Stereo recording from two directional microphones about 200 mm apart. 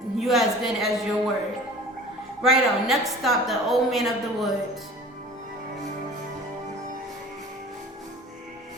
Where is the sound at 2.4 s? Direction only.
Centre (ahead or behind).